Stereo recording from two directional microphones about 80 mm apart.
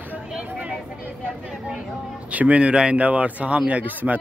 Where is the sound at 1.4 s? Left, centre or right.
Centre.